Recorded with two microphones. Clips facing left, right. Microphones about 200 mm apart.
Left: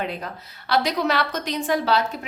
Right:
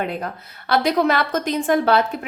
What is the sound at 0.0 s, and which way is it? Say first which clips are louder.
A woman's voice: right 4 dB; 50° right (ahead or behind).